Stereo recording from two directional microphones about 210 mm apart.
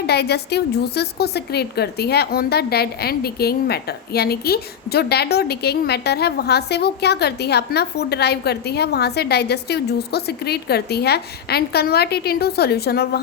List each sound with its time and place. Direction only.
0.1 s a woman's voice: 50° left (ahead or behind)